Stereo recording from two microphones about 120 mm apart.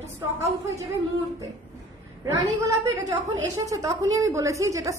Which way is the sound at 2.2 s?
25° right (ahead or behind).